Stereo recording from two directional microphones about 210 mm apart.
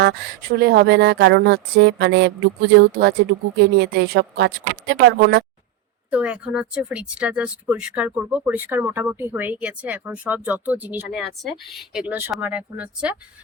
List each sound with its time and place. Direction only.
0.0 s speech: 50° right (ahead or behind)
6.1 s speech: 5° right (ahead or behind)